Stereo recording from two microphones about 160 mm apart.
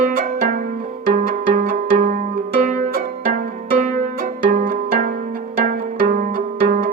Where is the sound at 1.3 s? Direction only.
60° right (ahead or behind).